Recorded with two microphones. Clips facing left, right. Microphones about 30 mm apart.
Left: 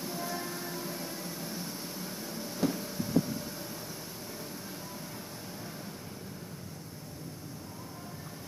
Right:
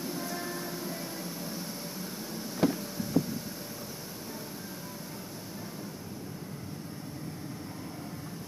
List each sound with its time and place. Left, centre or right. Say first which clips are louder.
0.0 s music: right 1 dB; centre
1.4 s vehicle: right 1 dB; centre
2.6 s a sound: right 3 dB; right